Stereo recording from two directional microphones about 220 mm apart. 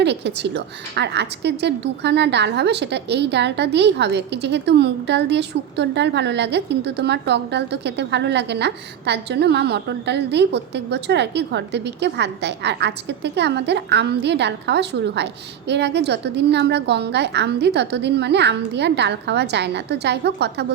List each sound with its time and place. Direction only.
0.0 s a woman's voice: 50° right (ahead or behind)